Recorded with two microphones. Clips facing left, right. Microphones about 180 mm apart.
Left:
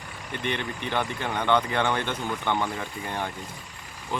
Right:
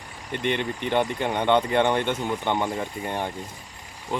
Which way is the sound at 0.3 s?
20° right (ahead or behind).